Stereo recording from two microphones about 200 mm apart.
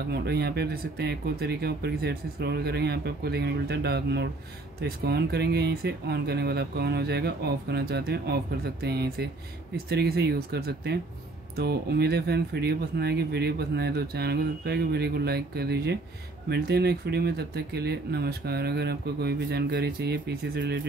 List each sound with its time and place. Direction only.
0.1 s speech: 55° right (ahead or behind)